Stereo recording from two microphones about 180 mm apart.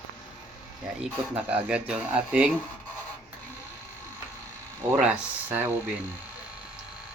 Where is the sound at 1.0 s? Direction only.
5° right (ahead or behind).